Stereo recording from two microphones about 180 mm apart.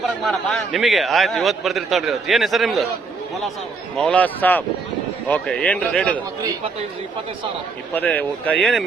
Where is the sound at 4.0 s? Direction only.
5° left (ahead or behind).